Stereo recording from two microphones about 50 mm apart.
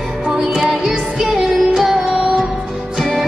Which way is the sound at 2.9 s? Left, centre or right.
Centre.